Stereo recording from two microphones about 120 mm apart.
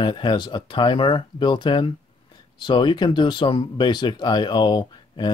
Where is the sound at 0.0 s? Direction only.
40° left (ahead or behind).